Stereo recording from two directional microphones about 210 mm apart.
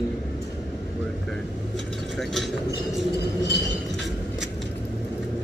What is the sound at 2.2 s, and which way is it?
Speech, centre (ahead or behind).